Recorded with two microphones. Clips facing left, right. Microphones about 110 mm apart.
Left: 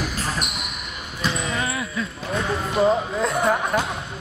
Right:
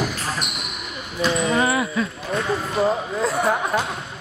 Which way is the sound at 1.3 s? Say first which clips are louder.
Right 7 dB; 30° right (ahead or behind).